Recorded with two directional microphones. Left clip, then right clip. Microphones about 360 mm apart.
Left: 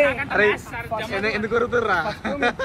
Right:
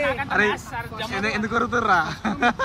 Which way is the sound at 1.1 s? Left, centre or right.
Centre.